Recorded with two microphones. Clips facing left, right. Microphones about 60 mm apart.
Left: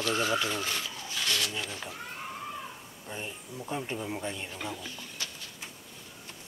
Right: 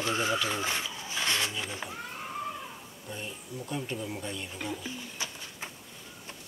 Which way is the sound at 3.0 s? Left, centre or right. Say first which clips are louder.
Left 1 dB; centre.